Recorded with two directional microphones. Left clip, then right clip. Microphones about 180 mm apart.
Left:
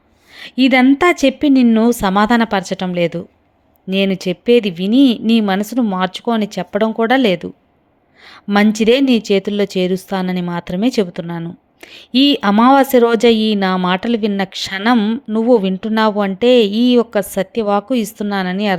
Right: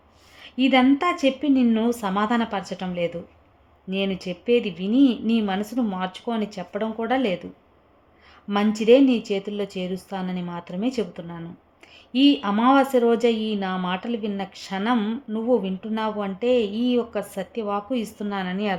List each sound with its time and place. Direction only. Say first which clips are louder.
0.3 s speech: left 7 dB; 35° left (ahead or behind)
15.3 s speech: left 10 dB; 40° left (ahead or behind)